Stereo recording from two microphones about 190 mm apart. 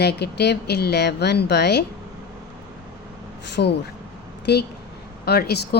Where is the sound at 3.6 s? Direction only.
60° left (ahead or behind).